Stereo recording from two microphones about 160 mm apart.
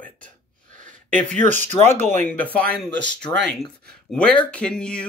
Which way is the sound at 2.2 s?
10° left (ahead or behind).